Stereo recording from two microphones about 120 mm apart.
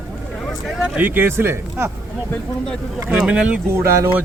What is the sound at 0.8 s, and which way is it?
Speech, 15° right (ahead or behind).